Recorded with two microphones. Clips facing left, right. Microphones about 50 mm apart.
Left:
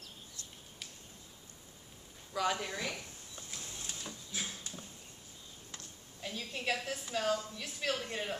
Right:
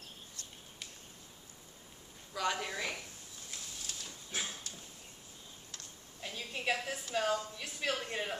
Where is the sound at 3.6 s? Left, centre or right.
Left.